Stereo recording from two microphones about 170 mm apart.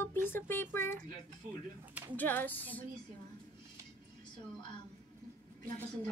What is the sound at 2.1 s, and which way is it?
Speech, 10° left (ahead or behind).